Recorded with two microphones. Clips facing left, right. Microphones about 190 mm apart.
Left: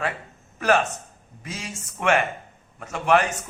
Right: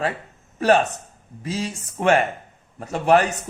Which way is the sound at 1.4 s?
35° right (ahead or behind).